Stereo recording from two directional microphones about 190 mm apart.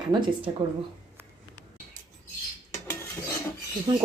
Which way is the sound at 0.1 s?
25° right (ahead or behind).